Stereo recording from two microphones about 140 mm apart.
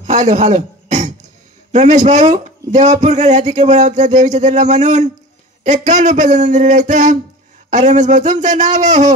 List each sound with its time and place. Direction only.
0.0 s throat clearing: 55° right (ahead or behind)
1.7 s speech: 60° right (ahead or behind)